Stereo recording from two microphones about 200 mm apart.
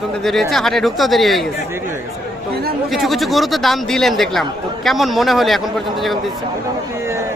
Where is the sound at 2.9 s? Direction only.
Centre (ahead or behind).